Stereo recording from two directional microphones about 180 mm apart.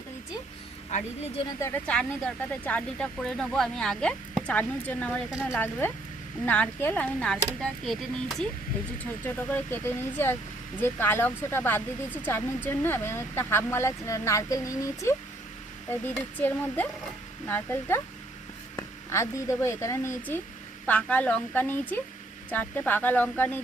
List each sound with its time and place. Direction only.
0.9 s speech: 40° left (ahead or behind)
1.5 s speech: 15° left (ahead or behind)
1.9 s speech: 5° left (ahead or behind)
5.3 s speech: 5° right (ahead or behind)
5.5 s speech: 10° left (ahead or behind)